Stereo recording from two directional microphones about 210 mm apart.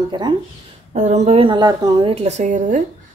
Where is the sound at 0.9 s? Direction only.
35° right (ahead or behind).